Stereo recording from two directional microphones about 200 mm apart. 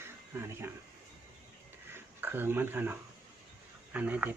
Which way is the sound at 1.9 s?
10° right (ahead or behind).